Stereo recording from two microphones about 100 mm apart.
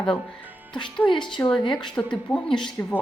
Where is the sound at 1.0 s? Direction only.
55° left (ahead or behind).